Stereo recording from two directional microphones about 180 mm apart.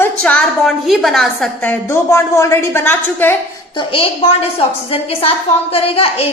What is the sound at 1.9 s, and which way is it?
A woman's voice, 15° left (ahead or behind).